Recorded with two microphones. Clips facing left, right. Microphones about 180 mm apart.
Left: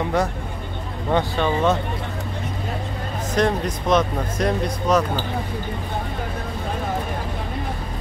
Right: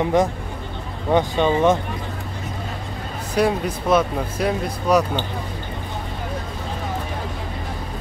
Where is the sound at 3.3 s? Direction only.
10° right (ahead or behind).